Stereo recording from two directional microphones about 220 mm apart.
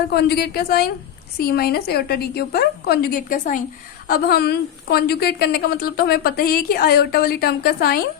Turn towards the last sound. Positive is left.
turn(degrees=45)  # may be behind; listen again after turning